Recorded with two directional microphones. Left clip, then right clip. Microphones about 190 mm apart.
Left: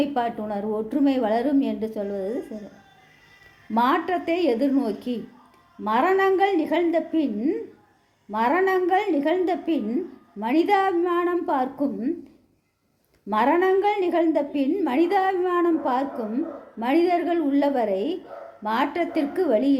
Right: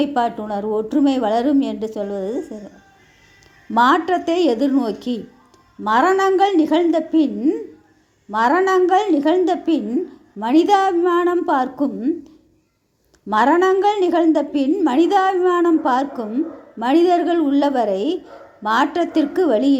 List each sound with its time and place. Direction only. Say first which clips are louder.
0.0 s a woman's voice: right 5 dB; 25° right (ahead or behind)
3.8 s a woman's voice: right 7 dB; 25° right (ahead or behind)
13.3 s a woman's voice: right 5 dB; 25° right (ahead or behind)